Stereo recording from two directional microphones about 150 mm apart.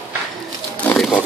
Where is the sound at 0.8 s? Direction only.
10° left (ahead or behind).